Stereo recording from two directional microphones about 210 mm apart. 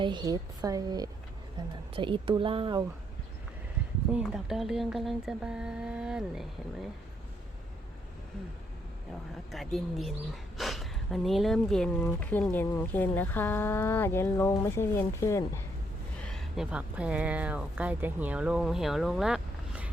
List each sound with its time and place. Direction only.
0.0 s a woman's voice: 20° right (ahead or behind)
4.1 s speech: 5° right (ahead or behind)
9.5 s speech: centre (ahead or behind)
16.2 s speech: centre (ahead or behind)